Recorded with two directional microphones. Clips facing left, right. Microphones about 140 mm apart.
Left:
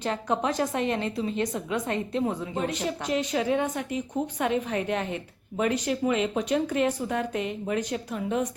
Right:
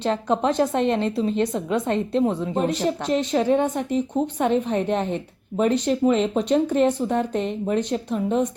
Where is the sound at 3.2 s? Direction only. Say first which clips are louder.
Right 4 dB; 30° right (ahead or behind).